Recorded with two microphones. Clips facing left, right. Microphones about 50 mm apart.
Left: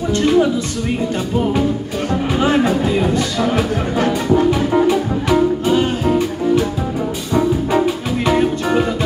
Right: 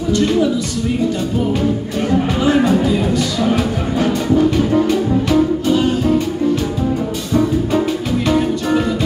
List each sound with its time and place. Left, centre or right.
2.4 s music: left
8.3 s music: centre